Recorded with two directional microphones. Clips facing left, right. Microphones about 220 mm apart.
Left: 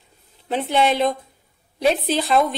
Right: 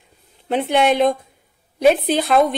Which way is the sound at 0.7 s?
50° right (ahead or behind).